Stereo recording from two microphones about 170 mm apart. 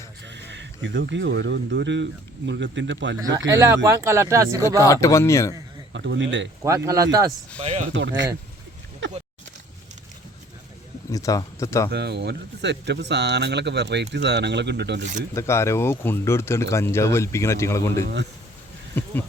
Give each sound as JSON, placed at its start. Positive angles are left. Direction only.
{"t": 0.3, "sound": "speech", "side_deg": -90}
{"t": 3.2, "sound": "speech", "side_deg": -20}
{"t": 4.8, "sound": "speech", "side_deg": 20}
{"t": 5.9, "sound": "speech", "side_deg": -90}
{"t": 6.6, "sound": "speech", "side_deg": -20}
{"t": 7.6, "sound": "speech", "side_deg": -40}
{"t": 7.9, "sound": "speech", "side_deg": -90}
{"t": 11.1, "sound": "speech", "side_deg": 20}
{"t": 11.9, "sound": "speech", "side_deg": -80}
{"t": 15.4, "sound": "speech", "side_deg": 15}